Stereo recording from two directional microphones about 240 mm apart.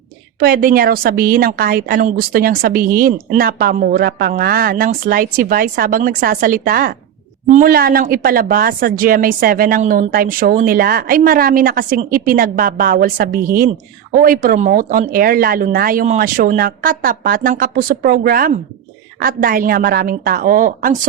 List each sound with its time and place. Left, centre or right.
0.3 s a woman's voice: right